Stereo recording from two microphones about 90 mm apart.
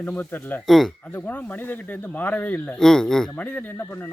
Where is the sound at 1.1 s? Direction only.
20° left (ahead or behind).